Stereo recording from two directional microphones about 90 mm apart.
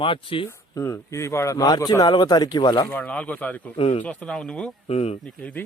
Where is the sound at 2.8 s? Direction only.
20° left (ahead or behind).